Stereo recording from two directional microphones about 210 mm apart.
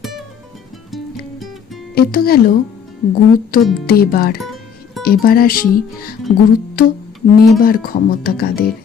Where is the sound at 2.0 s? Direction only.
45° left (ahead or behind).